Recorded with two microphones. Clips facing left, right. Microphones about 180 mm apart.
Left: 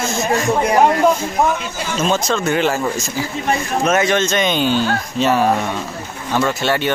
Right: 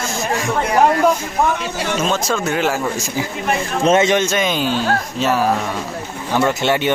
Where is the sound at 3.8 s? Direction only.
25° right (ahead or behind); by 5.6 s centre (ahead or behind).